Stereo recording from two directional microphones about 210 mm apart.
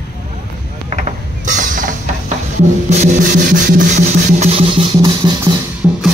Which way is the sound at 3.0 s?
40° right (ahead or behind).